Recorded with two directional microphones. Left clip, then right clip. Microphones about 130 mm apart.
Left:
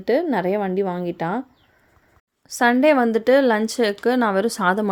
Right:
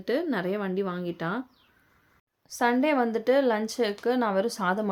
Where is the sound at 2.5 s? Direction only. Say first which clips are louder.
Left 8 dB; 45° left (ahead or behind).